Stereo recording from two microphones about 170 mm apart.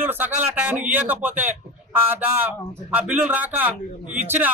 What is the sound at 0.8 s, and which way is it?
Speech, 10° right (ahead or behind).